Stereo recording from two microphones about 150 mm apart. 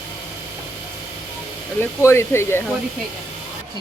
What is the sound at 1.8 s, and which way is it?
Speech, 15° left (ahead or behind).